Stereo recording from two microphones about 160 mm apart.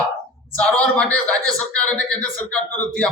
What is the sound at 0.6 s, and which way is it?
Speech, 5° left (ahead or behind).